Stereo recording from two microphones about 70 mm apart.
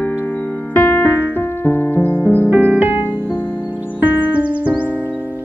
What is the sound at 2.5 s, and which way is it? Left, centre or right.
Music, right.